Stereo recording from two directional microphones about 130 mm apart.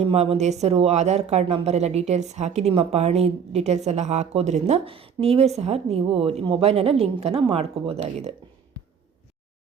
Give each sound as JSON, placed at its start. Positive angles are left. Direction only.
{"t": 0.0, "sound": "a woman's voice", "side_deg": -50}